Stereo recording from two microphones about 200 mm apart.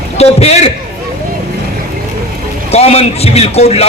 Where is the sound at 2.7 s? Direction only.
30° left (ahead or behind).